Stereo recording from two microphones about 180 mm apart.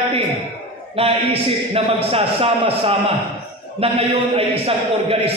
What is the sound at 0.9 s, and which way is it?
A man's voice, 30° right (ahead or behind).